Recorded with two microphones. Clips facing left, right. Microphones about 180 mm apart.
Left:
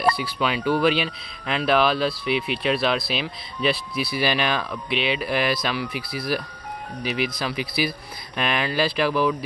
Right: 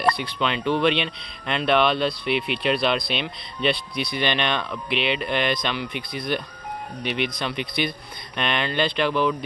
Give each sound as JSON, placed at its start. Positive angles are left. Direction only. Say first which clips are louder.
{"t": 0.0, "sound": "speech", "louder": "left 1 dB", "side_deg": 5}